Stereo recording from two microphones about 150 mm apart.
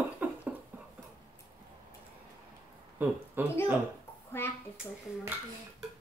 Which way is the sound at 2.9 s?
10° right (ahead or behind).